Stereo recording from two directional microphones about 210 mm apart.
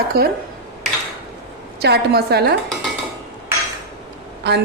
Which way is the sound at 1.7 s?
50° right (ahead or behind).